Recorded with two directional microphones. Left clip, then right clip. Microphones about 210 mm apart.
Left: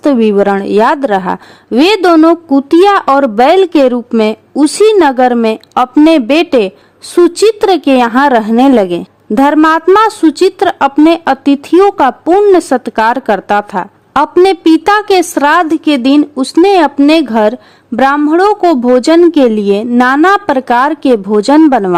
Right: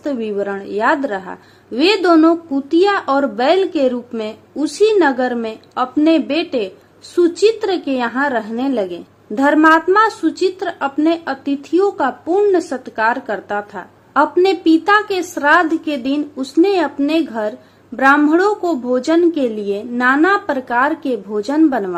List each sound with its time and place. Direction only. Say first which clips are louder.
0.0 s a woman's voice: left 12 dB; 50° left (ahead or behind)